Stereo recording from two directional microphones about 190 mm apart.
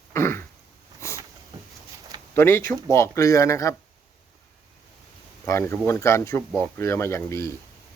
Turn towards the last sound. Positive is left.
turn(degrees=15)  # may be behind; listen again after turning